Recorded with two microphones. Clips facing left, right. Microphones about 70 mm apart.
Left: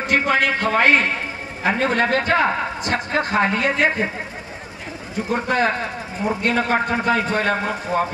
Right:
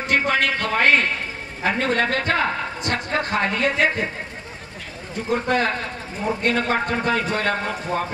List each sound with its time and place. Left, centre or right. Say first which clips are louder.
0.0 s a woman's voice: left 2 dB; centre
5.3 s a woman's voice: left 1 dB; centre